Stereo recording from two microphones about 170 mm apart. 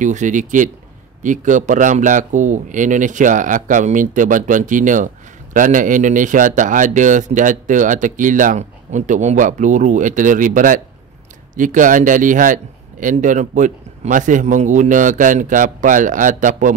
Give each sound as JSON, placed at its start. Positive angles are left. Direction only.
{"t": 0.0, "sound": "speech", "side_deg": -45}